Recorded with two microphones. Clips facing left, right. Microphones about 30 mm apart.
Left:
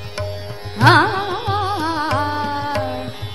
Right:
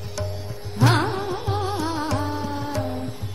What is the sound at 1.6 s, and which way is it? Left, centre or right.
Music, left.